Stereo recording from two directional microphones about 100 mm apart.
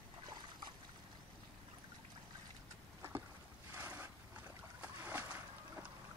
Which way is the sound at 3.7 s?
20° right (ahead or behind).